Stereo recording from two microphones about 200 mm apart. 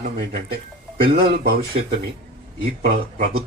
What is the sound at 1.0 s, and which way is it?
Speech, 50° right (ahead or behind).